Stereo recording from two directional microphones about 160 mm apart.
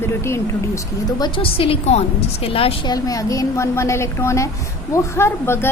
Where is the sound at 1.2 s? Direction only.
35° left (ahead or behind).